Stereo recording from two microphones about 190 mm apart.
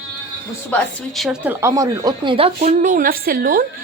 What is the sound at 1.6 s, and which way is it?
Speech, 15° right (ahead or behind).